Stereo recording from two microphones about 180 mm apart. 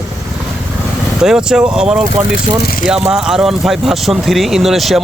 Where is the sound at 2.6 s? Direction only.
55° left (ahead or behind).